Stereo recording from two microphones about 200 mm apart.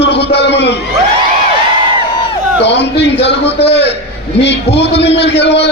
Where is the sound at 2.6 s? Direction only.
60° left (ahead or behind).